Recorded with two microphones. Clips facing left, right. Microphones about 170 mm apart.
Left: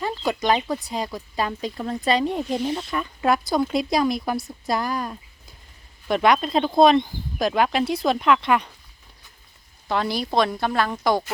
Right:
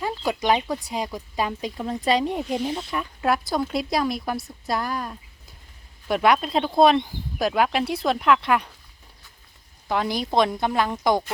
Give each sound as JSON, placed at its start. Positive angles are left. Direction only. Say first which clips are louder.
{"t": 0.0, "sound": "speech", "louder": "left 1 dB", "side_deg": -10}
{"t": 9.9, "sound": "speech", "louder": "even", "side_deg": -15}